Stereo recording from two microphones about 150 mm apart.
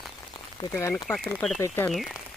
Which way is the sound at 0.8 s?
20° left (ahead or behind).